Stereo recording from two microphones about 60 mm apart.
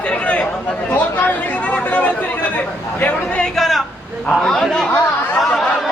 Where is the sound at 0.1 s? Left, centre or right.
Left.